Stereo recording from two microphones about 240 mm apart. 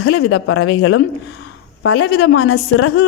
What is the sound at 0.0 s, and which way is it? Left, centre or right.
A woman's voice, left.